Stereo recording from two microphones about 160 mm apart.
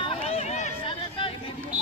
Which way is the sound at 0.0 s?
35° left (ahead or behind).